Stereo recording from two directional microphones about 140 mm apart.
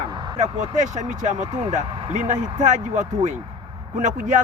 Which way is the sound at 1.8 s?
35° right (ahead or behind).